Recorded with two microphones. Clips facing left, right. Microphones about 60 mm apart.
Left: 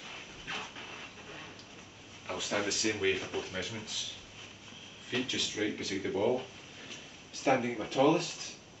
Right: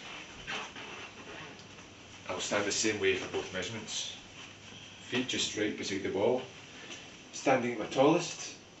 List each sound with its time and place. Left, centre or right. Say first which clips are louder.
0.0 s a sound: even; centre
2.2 s speech: right 1 dB; centre
5.1 s speech: right 1 dB; centre
7.4 s speech: right 1 dB; centre